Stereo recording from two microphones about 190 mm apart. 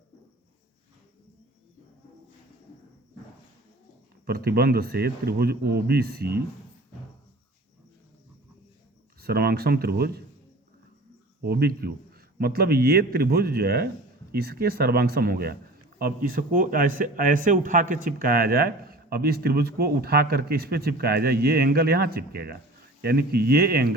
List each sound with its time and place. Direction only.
4.3 s a man's voice: 55° right (ahead or behind)
9.2 s a man's voice: 55° right (ahead or behind)
11.4 s a man's voice: 55° right (ahead or behind)